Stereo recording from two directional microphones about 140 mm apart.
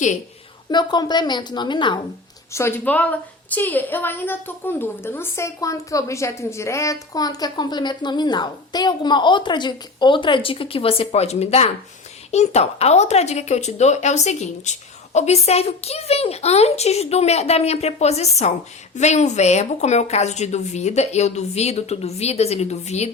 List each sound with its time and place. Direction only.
0.7 s a woman's voice: 30° left (ahead or behind)
2.5 s a woman's voice: 20° left (ahead or behind); by 23.0 s 50° left (ahead or behind)